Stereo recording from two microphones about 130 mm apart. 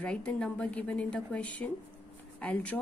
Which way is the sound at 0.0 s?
10° left (ahead or behind).